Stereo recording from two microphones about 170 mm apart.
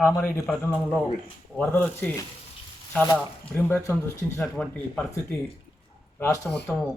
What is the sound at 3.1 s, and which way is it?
Speech, 15° left (ahead or behind).